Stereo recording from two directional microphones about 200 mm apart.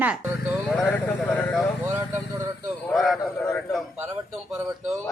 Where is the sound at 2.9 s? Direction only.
Centre (ahead or behind).